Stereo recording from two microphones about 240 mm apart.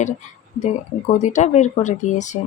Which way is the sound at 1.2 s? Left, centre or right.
Left.